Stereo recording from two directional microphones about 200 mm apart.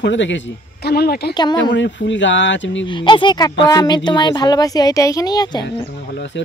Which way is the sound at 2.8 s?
25° left (ahead or behind).